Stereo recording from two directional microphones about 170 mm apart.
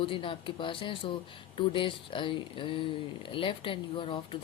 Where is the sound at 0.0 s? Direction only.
30° left (ahead or behind).